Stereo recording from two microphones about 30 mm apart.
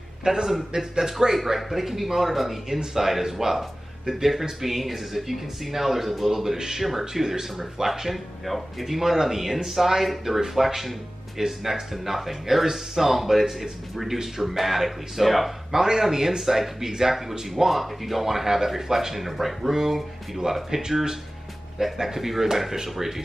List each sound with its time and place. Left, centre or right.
0.2 s a man's voice: right; by 2.8 s centre
2.8 s speech: centre
8.1 s speech: centre
15.8 s speech: centre